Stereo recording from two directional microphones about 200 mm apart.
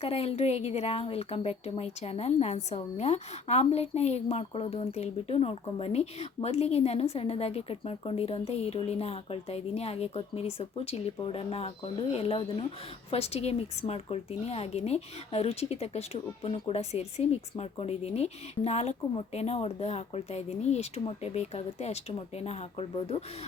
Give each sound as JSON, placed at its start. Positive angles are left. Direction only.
{"t": 0.0, "sound": "a woman's voice", "side_deg": 30}